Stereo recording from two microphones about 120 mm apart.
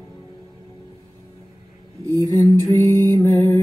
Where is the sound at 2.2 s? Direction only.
25° left (ahead or behind).